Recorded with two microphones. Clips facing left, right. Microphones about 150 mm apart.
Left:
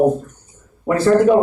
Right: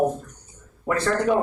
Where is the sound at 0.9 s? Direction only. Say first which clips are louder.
Left 8 dB; 5° left (ahead or behind).